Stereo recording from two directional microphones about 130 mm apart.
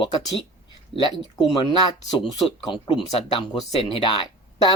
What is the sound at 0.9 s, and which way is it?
Speech, 40° left (ahead or behind).